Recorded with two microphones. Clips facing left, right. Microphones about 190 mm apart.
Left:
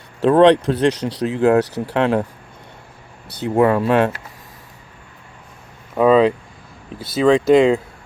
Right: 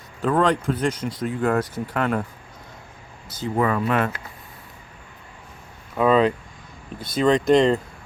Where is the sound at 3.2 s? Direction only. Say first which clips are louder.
Left 4 dB; 65° left (ahead or behind).